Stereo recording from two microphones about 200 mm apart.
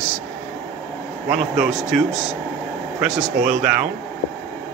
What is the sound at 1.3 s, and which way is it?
Speech, 40° right (ahead or behind).